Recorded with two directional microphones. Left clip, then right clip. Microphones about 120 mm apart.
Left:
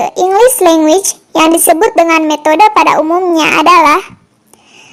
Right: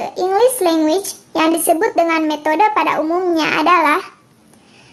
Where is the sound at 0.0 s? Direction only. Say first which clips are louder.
Left 7 dB; 40° left (ahead or behind).